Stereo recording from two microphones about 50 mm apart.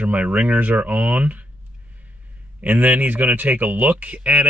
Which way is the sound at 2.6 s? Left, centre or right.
Right.